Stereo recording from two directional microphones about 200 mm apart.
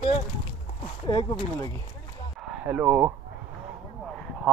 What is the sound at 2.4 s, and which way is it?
Speech, 5° right (ahead or behind).